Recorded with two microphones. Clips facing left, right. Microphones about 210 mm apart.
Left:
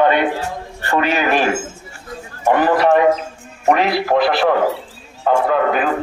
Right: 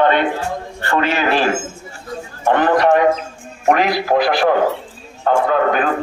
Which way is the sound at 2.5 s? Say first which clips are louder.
Even; 5° left (ahead or behind).